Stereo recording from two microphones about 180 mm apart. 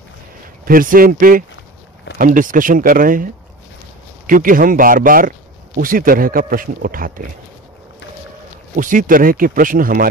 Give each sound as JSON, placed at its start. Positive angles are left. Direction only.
{"t": 0.7, "sound": "speech", "side_deg": -50}
{"t": 4.3, "sound": "speech", "side_deg": -50}
{"t": 8.7, "sound": "speech", "side_deg": -50}